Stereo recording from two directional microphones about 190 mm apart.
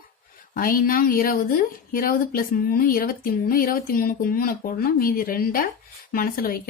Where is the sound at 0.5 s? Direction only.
50° left (ahead or behind).